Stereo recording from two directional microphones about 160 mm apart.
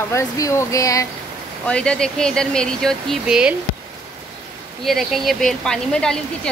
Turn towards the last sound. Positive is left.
turn(degrees=5)  # may be behind; listen again after turning